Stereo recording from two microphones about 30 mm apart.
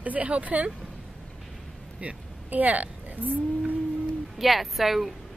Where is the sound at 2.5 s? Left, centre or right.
Right.